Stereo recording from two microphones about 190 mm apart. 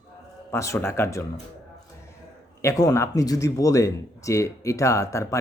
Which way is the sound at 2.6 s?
15° left (ahead or behind).